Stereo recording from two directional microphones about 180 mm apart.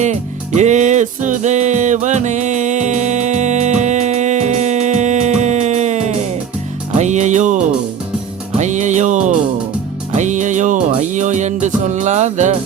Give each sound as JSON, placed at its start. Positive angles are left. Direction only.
{"t": 0.0, "sound": "music", "side_deg": -40}